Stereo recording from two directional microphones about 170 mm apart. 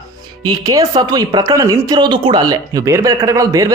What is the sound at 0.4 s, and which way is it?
A man's voice, 20° right (ahead or behind).